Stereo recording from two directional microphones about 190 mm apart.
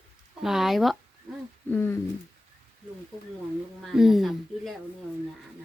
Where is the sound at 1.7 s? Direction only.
10° left (ahead or behind).